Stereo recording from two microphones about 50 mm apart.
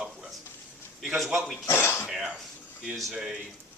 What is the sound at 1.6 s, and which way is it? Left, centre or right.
Speech, left.